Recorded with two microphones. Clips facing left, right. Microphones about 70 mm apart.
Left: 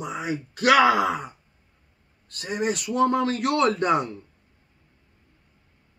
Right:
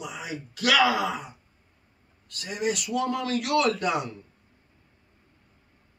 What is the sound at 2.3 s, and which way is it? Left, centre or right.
A child's voice, left.